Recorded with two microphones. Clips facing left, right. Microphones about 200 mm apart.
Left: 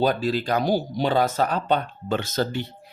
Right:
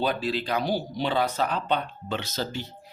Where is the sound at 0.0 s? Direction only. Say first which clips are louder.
Left 5 dB; 45° left (ahead or behind).